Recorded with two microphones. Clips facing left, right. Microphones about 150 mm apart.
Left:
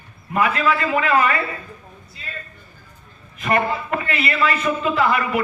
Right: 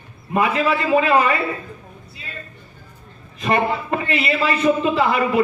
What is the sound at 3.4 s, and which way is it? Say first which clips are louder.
A man's voice: right 1 dB; 25° right (ahead or behind).